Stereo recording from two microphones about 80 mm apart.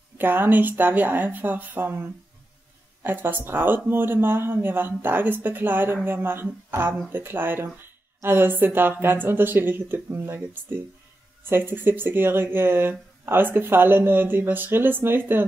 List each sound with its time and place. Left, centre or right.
0.2 s speech: right